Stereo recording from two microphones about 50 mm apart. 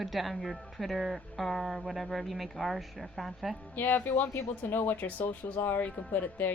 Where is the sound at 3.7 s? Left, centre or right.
Left.